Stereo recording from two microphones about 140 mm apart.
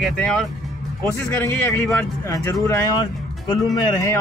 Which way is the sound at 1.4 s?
15° left (ahead or behind).